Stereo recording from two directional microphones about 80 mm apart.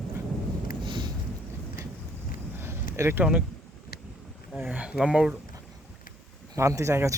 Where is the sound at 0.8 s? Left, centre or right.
Right.